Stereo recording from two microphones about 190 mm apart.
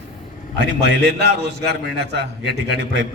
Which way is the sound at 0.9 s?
65° right (ahead or behind).